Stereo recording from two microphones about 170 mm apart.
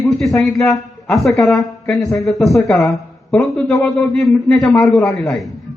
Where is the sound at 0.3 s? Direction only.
Centre (ahead or behind).